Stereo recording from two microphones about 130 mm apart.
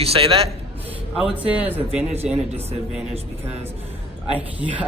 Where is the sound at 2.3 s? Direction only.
55° right (ahead or behind).